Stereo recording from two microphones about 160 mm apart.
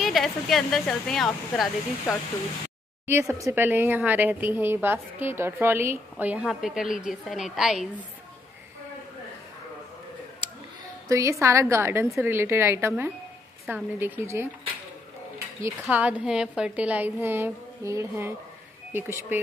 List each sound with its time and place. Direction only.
0.0 s speech: centre (ahead or behind)
3.1 s speech: 20° right (ahead or behind)
11.1 s speech: 20° right (ahead or behind)